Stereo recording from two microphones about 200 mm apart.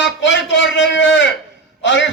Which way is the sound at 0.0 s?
65° left (ahead or behind).